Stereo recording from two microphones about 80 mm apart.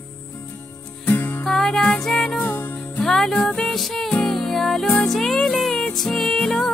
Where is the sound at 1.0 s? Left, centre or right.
Left.